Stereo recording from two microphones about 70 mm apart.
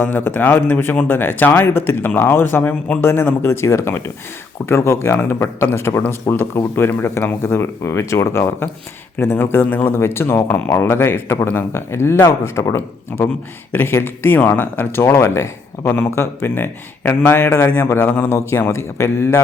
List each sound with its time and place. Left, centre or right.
0.0 s a man's voice: left
13.7 s speech: left
15.0 s speech: left